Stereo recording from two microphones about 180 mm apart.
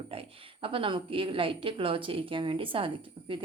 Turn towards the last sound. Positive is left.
turn(degrees=-30)  # may be behind; listen again after turning